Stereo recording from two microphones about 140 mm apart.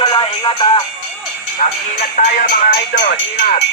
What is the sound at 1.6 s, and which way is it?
Speech, 65° left (ahead or behind).